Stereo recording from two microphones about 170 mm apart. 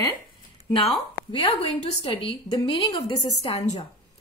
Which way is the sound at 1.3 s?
30° left (ahead or behind).